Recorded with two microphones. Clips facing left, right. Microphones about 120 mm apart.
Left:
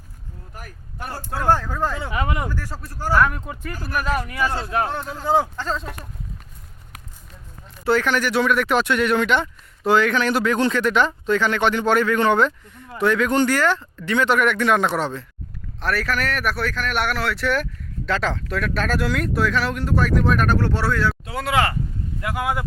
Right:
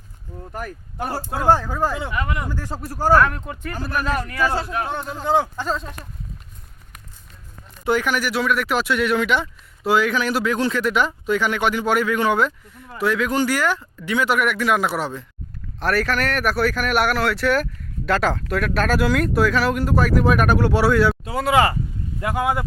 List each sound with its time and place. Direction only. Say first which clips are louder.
1.2 s speech: right 2 dB; 15° right (ahead or behind)
2.1 s speech: left 1 dB; 20° left (ahead or behind)
2.5 s speech: right 1 dB; 20° right (ahead or behind)
2.7 s speech: right 6 dB; 40° right (ahead or behind)
3.2 s speech: right 1 dB; 5° left (ahead or behind)
4.9 s speech: even; centre (ahead or behind)
5.5 s speech: right 1 dB; 10° right (ahead or behind)
7.9 s speech: left 1 dB; 10° right (ahead or behind)
21.2 s speech: right 4 dB; centre (ahead or behind)
22.2 s speech: right 3 dB; 25° right (ahead or behind)